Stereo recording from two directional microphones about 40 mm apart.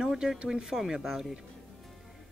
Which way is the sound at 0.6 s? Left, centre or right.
Centre.